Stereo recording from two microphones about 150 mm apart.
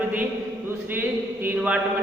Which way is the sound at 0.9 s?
15° right (ahead or behind).